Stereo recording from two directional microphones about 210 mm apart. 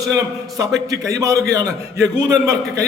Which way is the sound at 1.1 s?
15° right (ahead or behind).